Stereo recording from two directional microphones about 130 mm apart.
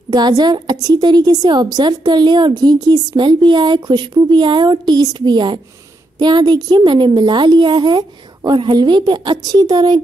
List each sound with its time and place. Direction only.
0.1 s a woman's voice: 30° right (ahead or behind)